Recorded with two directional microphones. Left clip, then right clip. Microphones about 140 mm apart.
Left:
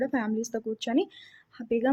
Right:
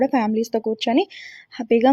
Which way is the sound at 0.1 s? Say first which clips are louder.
Right 10 dB; 35° right (ahead or behind).